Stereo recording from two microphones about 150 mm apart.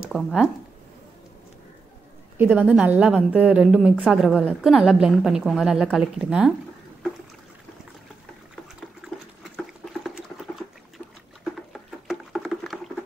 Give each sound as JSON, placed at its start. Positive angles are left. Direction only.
{"t": 0.0, "sound": "speech", "side_deg": -5}
{"t": 2.3, "sound": "a woman's voice", "side_deg": -10}
{"t": 9.0, "sound": "water", "side_deg": 0}
{"t": 11.4, "sound": "a sound", "side_deg": 0}